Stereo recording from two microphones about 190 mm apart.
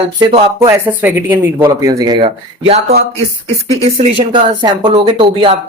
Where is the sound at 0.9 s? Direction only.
10° right (ahead or behind).